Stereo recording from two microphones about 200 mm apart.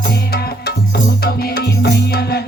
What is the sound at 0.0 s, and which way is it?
Music, 50° left (ahead or behind).